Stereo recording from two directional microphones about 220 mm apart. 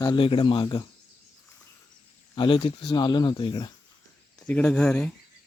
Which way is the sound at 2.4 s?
25° left (ahead or behind).